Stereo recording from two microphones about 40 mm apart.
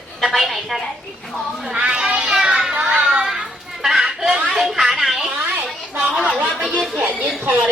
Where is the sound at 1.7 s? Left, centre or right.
Right.